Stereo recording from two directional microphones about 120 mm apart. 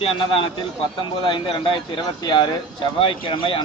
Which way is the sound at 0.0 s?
50° left (ahead or behind).